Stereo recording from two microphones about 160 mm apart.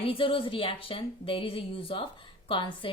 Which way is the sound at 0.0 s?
35° left (ahead or behind).